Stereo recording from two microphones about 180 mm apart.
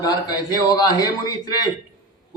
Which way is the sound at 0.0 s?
20° left (ahead or behind).